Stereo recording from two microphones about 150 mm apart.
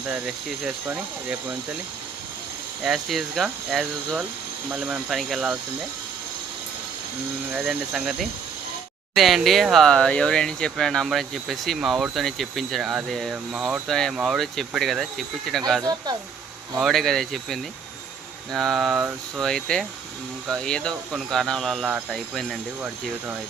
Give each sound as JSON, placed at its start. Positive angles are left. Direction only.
{"t": 0.1, "sound": "speech", "side_deg": -5}
{"t": 2.8, "sound": "speech", "side_deg": 0}
{"t": 7.5, "sound": "speech", "side_deg": -5}
{"t": 15.8, "sound": "speech", "side_deg": -25}
{"t": 16.8, "sound": "speech", "side_deg": 0}